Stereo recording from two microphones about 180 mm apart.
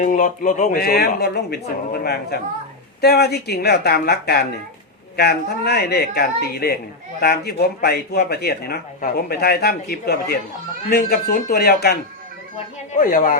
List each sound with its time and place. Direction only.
0.0 s a man's voice: 45° left (ahead or behind)
12.9 s speech: 50° left (ahead or behind)